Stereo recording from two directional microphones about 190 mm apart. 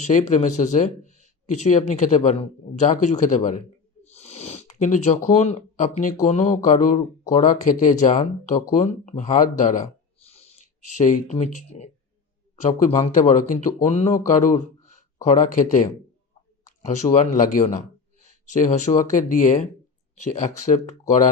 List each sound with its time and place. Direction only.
0.0 s speech: 40° left (ahead or behind)
13.1 s speech: 45° left (ahead or behind)